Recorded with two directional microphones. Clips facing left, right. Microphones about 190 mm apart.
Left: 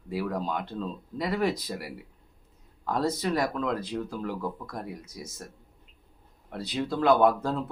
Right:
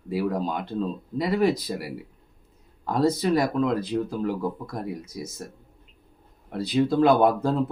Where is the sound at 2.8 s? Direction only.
10° right (ahead or behind).